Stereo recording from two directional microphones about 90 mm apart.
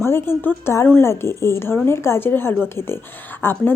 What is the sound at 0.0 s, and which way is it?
A woman's voice, 25° left (ahead or behind).